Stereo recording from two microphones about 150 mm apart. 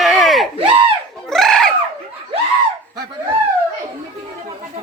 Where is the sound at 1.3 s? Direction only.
5° left (ahead or behind).